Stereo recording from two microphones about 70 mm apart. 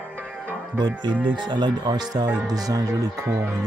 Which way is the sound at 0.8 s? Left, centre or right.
Right.